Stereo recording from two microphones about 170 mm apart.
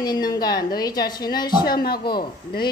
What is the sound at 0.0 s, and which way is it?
A woman's voice, 25° left (ahead or behind).